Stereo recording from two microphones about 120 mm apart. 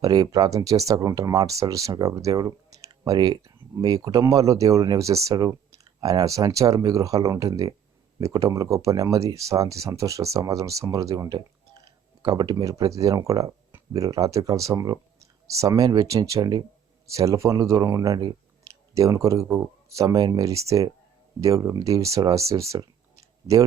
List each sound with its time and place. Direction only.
0.0 s speech: 30° right (ahead or behind)